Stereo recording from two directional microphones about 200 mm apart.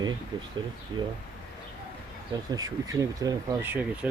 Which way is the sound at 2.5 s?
20° right (ahead or behind).